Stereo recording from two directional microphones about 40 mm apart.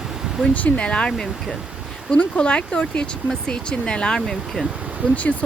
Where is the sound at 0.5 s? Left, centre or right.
Left.